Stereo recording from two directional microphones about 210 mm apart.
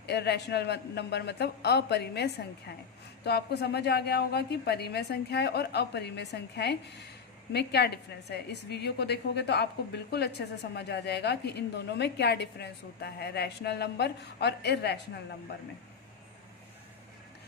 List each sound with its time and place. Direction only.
0.0 s a woman's voice: 50° left (ahead or behind)